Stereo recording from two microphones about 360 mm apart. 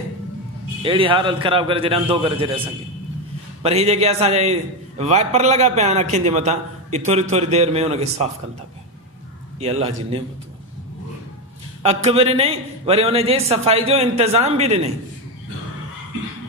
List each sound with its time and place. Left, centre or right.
0.8 s a man's voice: centre
3.6 s a man's voice: centre
9.6 s a man's voice: centre
11.8 s a man's voice: centre